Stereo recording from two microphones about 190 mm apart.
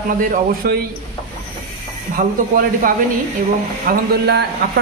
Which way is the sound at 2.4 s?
45° right (ahead or behind).